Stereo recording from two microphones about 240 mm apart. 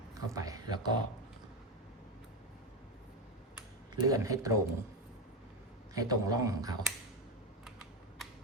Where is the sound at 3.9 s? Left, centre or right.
Centre.